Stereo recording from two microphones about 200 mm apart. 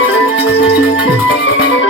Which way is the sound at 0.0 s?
75° left (ahead or behind).